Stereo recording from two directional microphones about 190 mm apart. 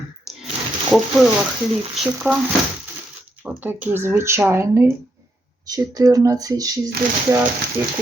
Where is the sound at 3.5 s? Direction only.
10° right (ahead or behind).